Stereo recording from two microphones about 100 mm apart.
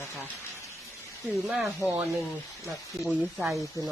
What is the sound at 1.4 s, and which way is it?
Speech, centre (ahead or behind).